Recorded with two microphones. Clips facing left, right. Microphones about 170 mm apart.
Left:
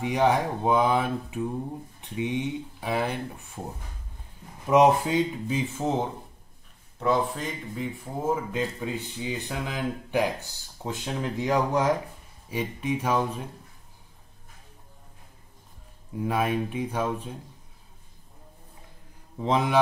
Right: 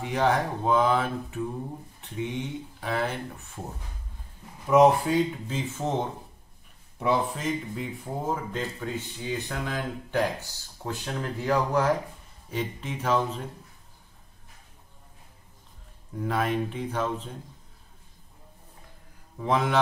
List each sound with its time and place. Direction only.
0.0 s speech: 15° left (ahead or behind)
4.6 s speech: 20° left (ahead or behind)
7.0 s speech: 5° right (ahead or behind); by 13.4 s 10° left (ahead or behind)
16.2 s speech: 10° left (ahead or behind)
19.4 s speech: 15° left (ahead or behind)